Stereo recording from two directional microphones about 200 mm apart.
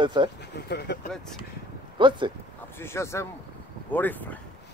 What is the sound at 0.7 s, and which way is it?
Speech, 55° left (ahead or behind).